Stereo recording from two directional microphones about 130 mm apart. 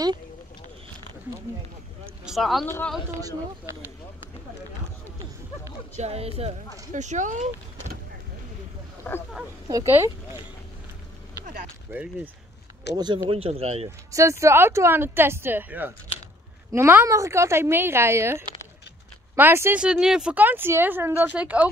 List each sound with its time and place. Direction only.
2.2 s speech: centre (ahead or behind)
2.6 s speech: 15° left (ahead or behind)
5.9 s speech: 55° right (ahead or behind)
6.9 s speech: 70° right (ahead or behind)
9.8 s speech: 15° right (ahead or behind)
12.9 s speech: 30° right (ahead or behind); by 13.8 s 55° right (ahead or behind)
14.1 s speech: 20° right (ahead or behind)
19.8 s speech: 5° right (ahead or behind)